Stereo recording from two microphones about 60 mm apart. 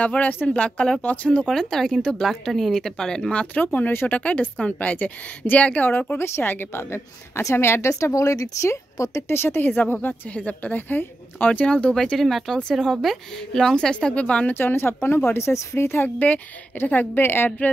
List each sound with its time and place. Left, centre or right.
0.0 s speech: left
0.6 s speech: centre
1.0 s speech: left
3.5 s speech: left
4.2 s speech: left
5.9 s a woman's voice: left
7.9 s speech: left
9.3 s a woman's voice: left; by 12.0 s centre
12.0 s speech: centre; by 14.5 s left
14.5 s a woman's voice: left